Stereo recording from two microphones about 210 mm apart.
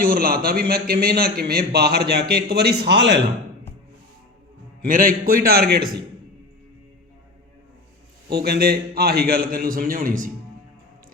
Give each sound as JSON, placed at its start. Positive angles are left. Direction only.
{"t": 0.0, "sound": "a man's voice", "side_deg": -45}
{"t": 4.9, "sound": "a man's voice", "side_deg": -40}
{"t": 8.3, "sound": "a man's voice", "side_deg": -50}